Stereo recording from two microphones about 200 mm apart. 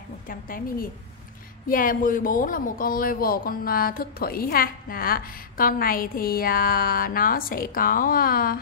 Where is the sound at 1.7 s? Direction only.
45° left (ahead or behind).